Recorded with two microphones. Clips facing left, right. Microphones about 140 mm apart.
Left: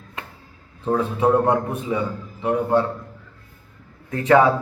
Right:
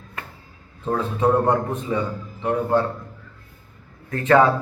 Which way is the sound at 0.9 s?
15° left (ahead or behind).